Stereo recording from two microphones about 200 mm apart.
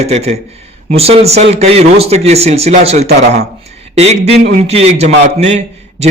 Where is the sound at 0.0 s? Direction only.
30° right (ahead or behind).